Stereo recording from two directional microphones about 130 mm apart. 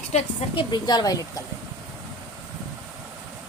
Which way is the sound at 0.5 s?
35° left (ahead or behind).